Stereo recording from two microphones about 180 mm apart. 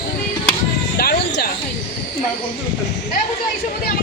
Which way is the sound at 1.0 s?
60° left (ahead or behind).